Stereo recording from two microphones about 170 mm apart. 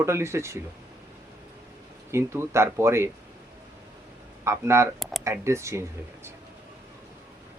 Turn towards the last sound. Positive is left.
turn(degrees=-15)  # may be behind; listen again after turning